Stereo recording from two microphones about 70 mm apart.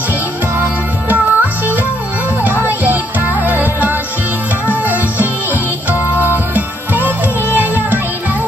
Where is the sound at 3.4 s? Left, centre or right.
Right.